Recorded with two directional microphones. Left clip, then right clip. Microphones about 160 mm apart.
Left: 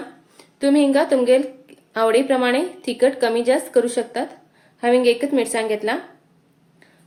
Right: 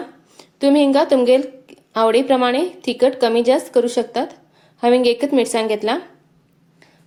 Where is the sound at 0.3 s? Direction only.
30° right (ahead or behind).